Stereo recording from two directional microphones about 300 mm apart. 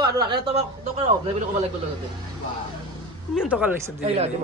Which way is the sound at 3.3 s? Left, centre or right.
Centre.